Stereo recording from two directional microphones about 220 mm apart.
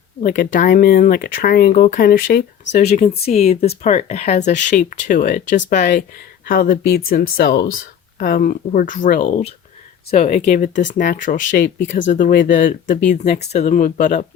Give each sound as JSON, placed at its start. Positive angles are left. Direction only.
{"t": 0.2, "sound": "speech", "side_deg": 35}
{"t": 2.8, "sound": "speech", "side_deg": 30}